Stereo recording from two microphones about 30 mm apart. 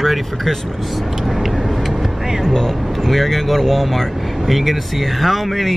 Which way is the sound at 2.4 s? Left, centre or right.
Centre.